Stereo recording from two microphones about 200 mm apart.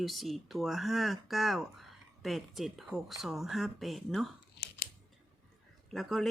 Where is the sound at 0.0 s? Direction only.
Centre (ahead or behind).